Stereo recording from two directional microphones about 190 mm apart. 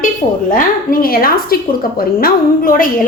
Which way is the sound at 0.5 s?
50° left (ahead or behind).